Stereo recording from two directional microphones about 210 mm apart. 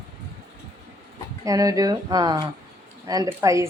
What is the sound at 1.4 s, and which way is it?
Speech, 15° right (ahead or behind).